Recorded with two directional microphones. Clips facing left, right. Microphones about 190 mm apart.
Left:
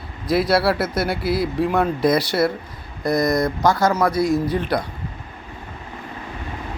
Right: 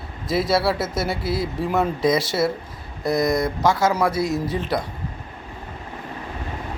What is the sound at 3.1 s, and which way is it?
Speech, 25° right (ahead or behind).